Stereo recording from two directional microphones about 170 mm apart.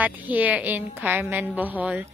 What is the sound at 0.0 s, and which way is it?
Speech, 10° right (ahead or behind).